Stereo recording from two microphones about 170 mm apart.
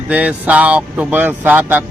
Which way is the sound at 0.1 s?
10° right (ahead or behind).